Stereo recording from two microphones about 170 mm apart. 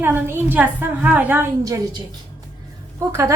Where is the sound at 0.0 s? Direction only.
15° right (ahead or behind).